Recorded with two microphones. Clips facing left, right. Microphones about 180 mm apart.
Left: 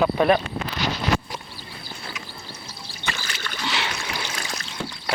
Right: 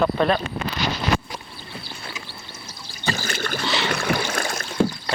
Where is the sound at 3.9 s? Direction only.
55° right (ahead or behind).